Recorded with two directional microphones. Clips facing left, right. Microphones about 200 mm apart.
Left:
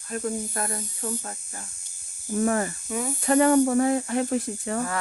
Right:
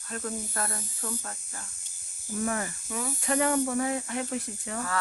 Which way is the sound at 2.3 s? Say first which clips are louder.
Left 7 dB; 50° left (ahead or behind).